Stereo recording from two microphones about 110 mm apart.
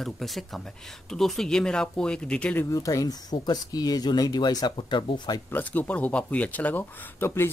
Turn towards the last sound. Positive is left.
turn(degrees=20)  # may be behind; listen again after turning